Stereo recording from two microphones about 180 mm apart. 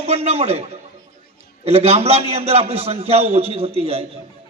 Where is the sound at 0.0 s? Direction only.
35° right (ahead or behind).